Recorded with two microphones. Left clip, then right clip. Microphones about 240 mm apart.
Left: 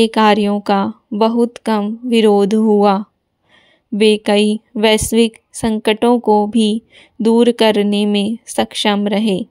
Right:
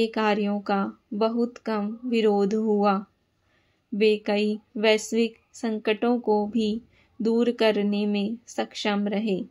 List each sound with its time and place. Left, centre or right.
0.0 s a woman's voice: left